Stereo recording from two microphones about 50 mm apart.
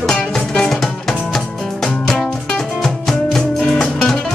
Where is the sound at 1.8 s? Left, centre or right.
Left.